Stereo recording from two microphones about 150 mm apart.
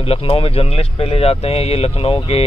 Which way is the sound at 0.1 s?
40° left (ahead or behind).